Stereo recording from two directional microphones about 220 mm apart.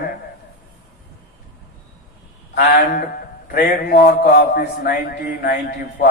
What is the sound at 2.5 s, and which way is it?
A man's voice, 40° left (ahead or behind).